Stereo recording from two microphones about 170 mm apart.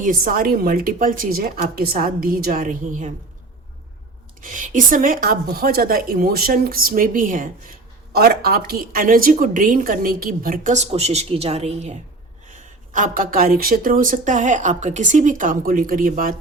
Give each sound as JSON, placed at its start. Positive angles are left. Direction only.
{"t": 0.0, "sound": "a woman's voice", "side_deg": -55}
{"t": 4.4, "sound": "a woman's voice", "side_deg": -50}
{"t": 8.1, "sound": "a woman's voice", "side_deg": -65}